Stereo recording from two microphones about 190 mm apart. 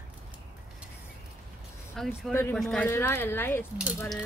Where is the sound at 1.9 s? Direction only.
Centre (ahead or behind).